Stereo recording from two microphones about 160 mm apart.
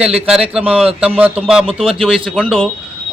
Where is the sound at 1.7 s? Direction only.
35° right (ahead or behind).